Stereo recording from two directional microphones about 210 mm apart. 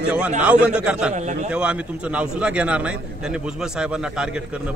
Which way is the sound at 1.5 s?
5° right (ahead or behind).